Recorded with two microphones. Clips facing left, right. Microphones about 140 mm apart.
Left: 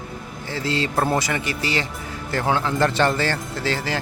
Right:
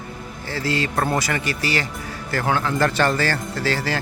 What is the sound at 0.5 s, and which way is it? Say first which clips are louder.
Speech: even; 25° left (ahead or behind).